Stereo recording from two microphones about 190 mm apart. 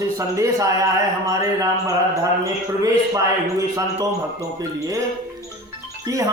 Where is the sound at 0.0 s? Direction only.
15° right (ahead or behind).